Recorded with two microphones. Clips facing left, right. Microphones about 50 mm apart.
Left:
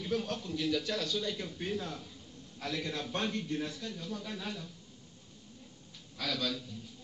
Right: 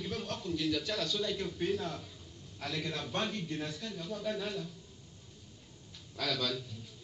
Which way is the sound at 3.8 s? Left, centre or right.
Centre.